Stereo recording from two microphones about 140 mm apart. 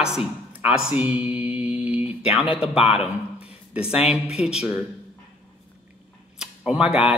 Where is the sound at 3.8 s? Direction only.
45° left (ahead or behind).